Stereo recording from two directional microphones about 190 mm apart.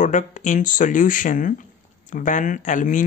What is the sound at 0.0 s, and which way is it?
Speech, 40° left (ahead or behind).